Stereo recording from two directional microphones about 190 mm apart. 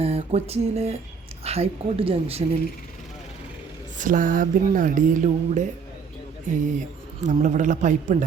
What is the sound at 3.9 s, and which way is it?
Speech, 45° right (ahead or behind).